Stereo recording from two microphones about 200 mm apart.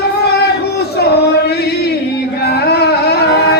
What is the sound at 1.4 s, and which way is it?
Chant, 50° left (ahead or behind).